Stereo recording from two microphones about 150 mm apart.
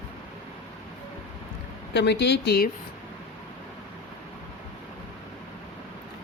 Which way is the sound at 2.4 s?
90° left.